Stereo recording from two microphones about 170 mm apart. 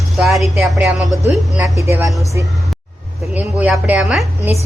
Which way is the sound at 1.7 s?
15° right (ahead or behind).